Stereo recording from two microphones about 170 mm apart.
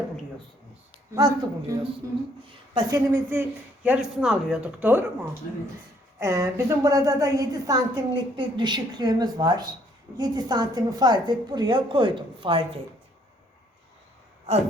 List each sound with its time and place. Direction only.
1.1 s a woman's voice: 20° right (ahead or behind)
3.8 s speech: 5° right (ahead or behind)
6.1 s a woman's voice: 15° right (ahead or behind)